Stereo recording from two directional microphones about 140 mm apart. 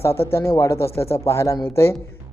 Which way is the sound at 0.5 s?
20° left (ahead or behind).